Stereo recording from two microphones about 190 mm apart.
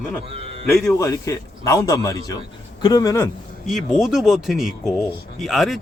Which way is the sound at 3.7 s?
Centre (ahead or behind).